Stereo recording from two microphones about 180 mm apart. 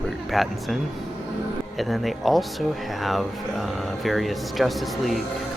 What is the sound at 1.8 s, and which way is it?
Speech, centre (ahead or behind).